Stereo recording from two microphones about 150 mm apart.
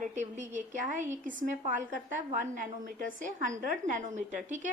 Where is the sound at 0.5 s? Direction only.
55° right (ahead or behind).